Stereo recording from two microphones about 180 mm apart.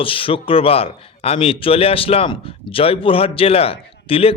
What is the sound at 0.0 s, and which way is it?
Speech, 30° left (ahead or behind).